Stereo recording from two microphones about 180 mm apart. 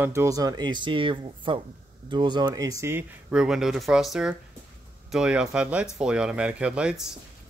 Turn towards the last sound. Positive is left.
turn(degrees=0)  # may be behind; listen again after turning